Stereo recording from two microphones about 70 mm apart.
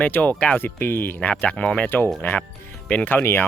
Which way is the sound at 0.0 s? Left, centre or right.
Left.